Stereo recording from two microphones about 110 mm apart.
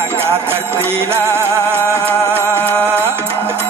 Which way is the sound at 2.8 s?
20° right (ahead or behind).